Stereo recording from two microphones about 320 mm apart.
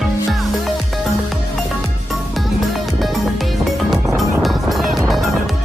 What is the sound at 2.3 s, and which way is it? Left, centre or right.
Music, centre.